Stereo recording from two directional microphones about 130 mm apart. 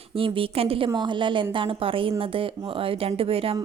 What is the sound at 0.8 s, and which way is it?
A woman's voice, 35° right (ahead or behind).